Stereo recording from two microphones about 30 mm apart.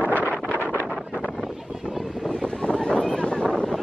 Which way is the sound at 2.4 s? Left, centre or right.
Left.